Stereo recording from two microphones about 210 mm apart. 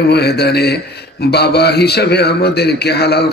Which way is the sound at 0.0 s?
50° left (ahead or behind).